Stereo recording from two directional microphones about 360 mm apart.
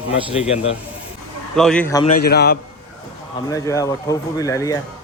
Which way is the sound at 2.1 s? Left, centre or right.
Left.